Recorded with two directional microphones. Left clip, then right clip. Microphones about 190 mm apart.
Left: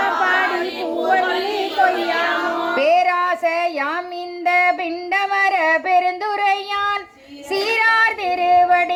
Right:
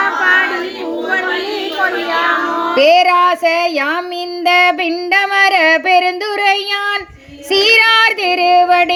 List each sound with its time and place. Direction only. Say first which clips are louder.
0.2 s child singing: right 8 dB; centre (ahead or behind)
1.8 s a sound: right 1 dB; 10° left (ahead or behind)
2.8 s a sound: right 7 dB; 30° right (ahead or behind)
4.4 s female singing: right 5 dB; 30° right (ahead or behind)
7.5 s child singing: right 7 dB; 25° right (ahead or behind)
8.6 s music: right 4 dB; 30° right (ahead or behind)